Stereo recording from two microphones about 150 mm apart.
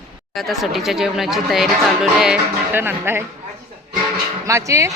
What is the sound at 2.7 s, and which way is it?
Speech, 15° right (ahead or behind).